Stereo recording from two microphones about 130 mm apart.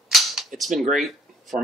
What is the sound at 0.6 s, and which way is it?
Speech, centre (ahead or behind).